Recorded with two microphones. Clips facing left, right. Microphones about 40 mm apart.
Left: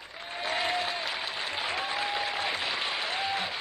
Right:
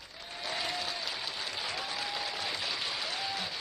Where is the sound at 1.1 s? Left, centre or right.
Left.